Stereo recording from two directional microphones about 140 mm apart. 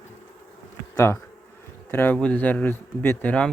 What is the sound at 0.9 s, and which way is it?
Bee, 20° left (ahead or behind).